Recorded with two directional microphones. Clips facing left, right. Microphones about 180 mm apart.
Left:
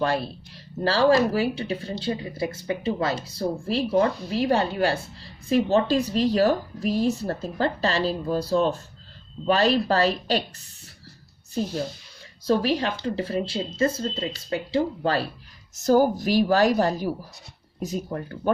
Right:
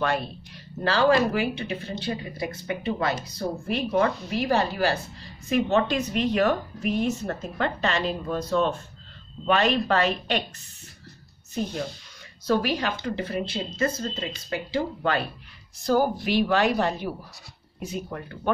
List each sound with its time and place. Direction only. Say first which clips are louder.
0.0 s a woman's voice: left 2 dB; 30° left (ahead or behind)
12.4 s speech: left 2 dB; 30° left (ahead or behind)
15.7 s a woman's voice: left 4 dB; 45° left (ahead or behind)